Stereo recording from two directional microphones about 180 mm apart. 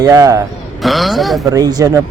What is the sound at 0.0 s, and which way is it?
Speech, 20° right (ahead or behind).